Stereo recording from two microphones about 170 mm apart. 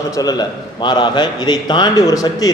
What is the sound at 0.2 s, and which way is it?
A man's voice, 25° left (ahead or behind).